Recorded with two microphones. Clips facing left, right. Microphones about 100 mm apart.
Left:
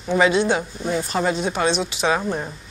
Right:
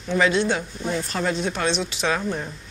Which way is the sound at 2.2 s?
20° left (ahead or behind).